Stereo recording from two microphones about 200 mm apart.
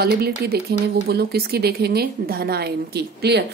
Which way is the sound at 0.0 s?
50° right (ahead or behind).